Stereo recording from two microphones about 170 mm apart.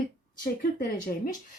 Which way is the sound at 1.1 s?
45° left (ahead or behind).